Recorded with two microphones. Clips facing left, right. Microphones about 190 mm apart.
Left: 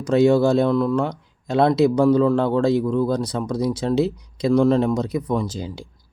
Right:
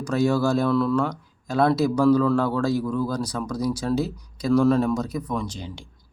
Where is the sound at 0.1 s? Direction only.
25° left (ahead or behind).